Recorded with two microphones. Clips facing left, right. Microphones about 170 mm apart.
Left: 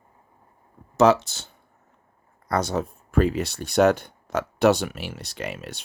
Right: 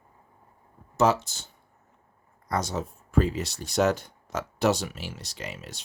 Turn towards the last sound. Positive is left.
turn(degrees=60)  # may be behind; listen again after turning